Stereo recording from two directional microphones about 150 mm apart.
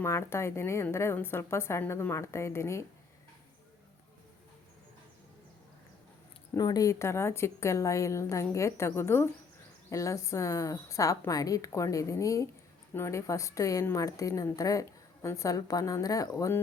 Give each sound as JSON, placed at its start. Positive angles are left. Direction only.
{"t": 0.0, "sound": "a woman's voice", "side_deg": 15}
{"t": 6.6, "sound": "a woman's voice", "side_deg": 25}